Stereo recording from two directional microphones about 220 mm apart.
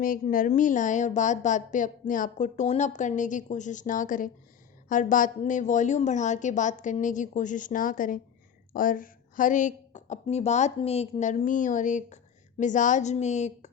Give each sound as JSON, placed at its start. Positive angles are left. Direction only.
{"t": 0.0, "sound": "a woman's voice", "side_deg": 40}